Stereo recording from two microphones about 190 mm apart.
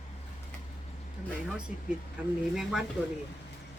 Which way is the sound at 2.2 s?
5° right (ahead or behind).